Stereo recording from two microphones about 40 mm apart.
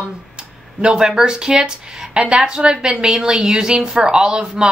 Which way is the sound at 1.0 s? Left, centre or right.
Centre.